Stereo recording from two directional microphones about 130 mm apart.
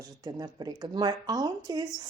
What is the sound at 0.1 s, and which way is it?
Speech, 30° right (ahead or behind).